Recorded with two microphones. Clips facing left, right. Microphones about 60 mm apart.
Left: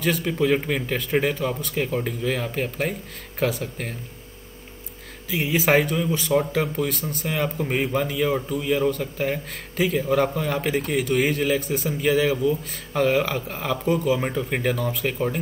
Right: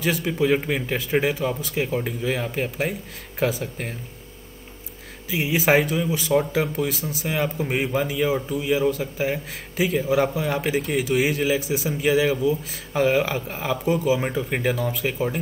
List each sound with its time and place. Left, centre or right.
0.0 s speech: centre
5.3 s speech: centre